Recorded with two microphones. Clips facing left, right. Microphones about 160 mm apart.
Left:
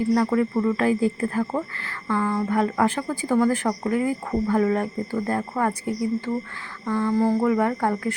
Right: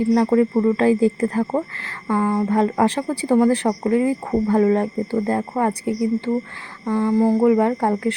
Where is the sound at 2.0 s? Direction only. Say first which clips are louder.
Right 4 dB; 20° right (ahead or behind).